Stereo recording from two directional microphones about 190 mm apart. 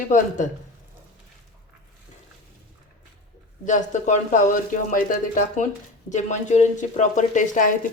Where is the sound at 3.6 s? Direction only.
40° left (ahead or behind).